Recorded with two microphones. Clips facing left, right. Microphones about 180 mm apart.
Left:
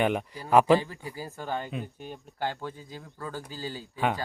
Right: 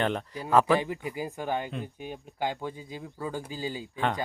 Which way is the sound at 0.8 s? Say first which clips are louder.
Right 4 dB; 15° right (ahead or behind).